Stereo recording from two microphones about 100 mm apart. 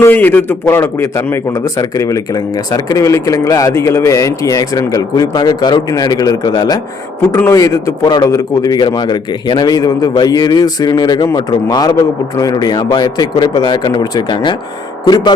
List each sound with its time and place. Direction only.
0.0 s a man's voice: 20° left (ahead or behind)
2.7 s speech: 30° left (ahead or behind)
7.3 s speech: 30° left (ahead or behind); by 15.3 s 45° left (ahead or behind)